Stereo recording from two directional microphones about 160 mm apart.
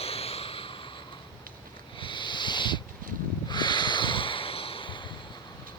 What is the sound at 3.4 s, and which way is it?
Snort, 30° left (ahead or behind).